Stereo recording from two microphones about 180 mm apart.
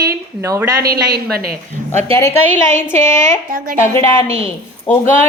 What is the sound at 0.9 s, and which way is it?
Speech, 55° right (ahead or behind).